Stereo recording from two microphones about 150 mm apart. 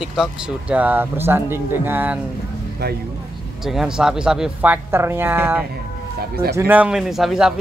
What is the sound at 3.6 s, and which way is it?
Speech, 5° right (ahead or behind).